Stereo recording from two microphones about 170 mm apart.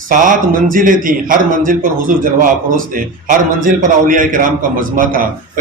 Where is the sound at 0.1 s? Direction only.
50° right (ahead or behind).